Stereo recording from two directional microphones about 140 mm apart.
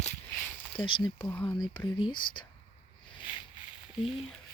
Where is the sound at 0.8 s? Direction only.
35° left (ahead or behind).